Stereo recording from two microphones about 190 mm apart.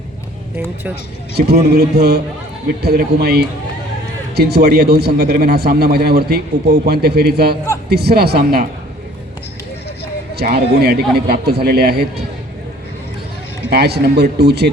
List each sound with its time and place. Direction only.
1.4 s a man's voice: 55° right (ahead or behind)
10.3 s a man's voice: 55° right (ahead or behind)
13.7 s a man's voice: 55° right (ahead or behind)